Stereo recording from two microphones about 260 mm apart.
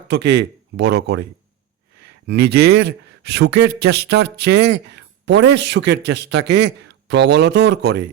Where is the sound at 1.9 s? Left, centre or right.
Right.